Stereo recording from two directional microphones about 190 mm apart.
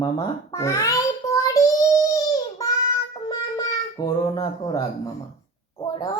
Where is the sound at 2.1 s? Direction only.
15° left (ahead or behind).